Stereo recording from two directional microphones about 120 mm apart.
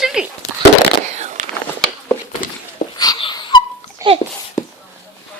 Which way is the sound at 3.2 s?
45° left (ahead or behind).